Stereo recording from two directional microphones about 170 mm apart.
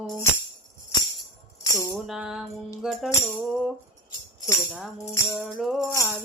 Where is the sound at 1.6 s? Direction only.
15° left (ahead or behind).